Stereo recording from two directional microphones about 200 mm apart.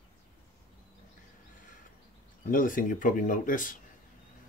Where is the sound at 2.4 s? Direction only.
45° left (ahead or behind).